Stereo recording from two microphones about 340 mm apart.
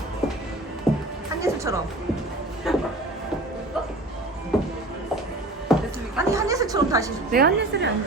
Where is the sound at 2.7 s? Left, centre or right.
Centre.